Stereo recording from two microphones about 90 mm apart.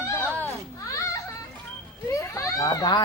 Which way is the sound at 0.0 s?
25° left (ahead or behind).